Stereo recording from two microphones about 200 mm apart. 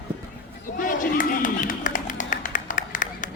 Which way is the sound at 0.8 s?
40° left (ahead or behind).